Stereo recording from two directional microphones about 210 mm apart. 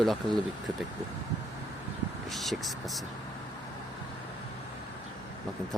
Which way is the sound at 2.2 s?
Centre (ahead or behind).